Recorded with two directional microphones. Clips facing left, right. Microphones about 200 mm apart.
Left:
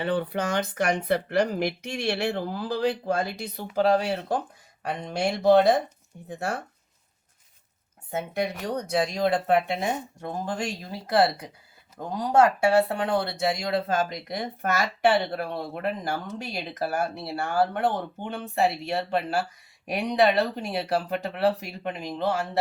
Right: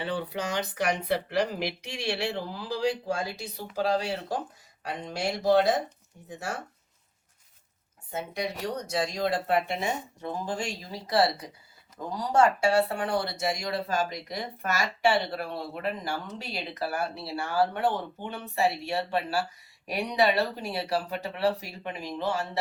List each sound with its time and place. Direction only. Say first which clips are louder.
0.0 s speech: left 5 dB; 55° left (ahead or behind)
8.1 s speech: left 4 dB; 55° left (ahead or behind)